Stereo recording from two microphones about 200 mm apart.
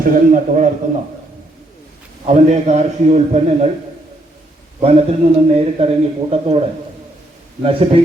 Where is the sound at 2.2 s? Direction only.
35° right (ahead or behind).